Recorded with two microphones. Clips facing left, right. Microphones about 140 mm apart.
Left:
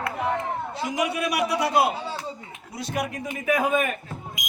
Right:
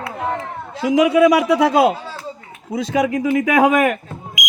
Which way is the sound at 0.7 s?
90° right.